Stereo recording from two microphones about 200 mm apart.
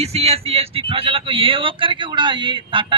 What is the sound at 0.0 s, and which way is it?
Speech, 30° right (ahead or behind).